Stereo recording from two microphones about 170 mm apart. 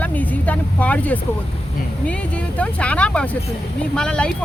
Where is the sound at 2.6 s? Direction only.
5° left (ahead or behind).